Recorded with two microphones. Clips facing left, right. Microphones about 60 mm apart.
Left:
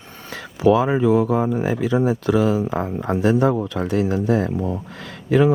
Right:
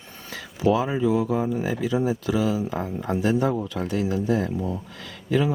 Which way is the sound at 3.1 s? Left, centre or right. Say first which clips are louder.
Left 5 dB; left.